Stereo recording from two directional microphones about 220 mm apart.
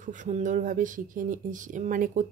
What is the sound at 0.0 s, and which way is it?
Speech, 35° right (ahead or behind).